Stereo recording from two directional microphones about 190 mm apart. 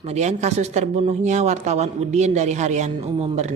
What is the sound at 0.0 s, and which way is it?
Speech, 35° right (ahead or behind).